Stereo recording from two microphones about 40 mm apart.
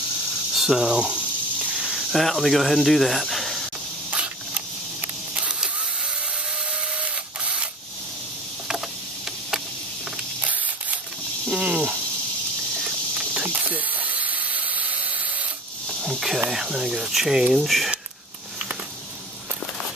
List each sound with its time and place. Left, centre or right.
0.3 s snake: centre
0.9 s a sound: right
1.8 s snake: centre
2.2 s speech: centre
4.1 s a sound: right
7.0 s printer: right
10.4 s spray: right
11.4 s a sound: right
13.6 s steam: right
16.0 s snake: centre
16.4 s cricket: centre
17.1 s speech: centre
17.6 s speech: centre